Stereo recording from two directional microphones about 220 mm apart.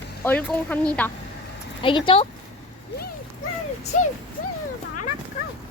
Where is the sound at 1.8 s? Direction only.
25° left (ahead or behind).